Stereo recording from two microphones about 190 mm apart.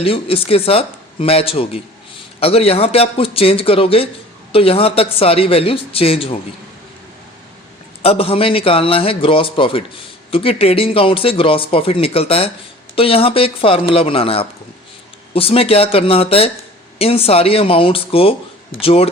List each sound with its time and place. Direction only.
0.0 s speech: 30° left (ahead or behind)
8.0 s speech: 30° left (ahead or behind)